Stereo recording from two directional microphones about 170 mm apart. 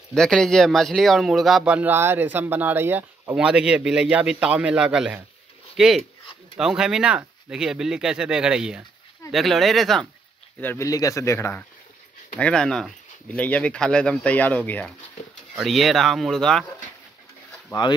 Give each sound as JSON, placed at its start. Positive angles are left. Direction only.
{"t": 0.1, "sound": "speech", "side_deg": 5}
{"t": 10.6, "sound": "speech", "side_deg": 15}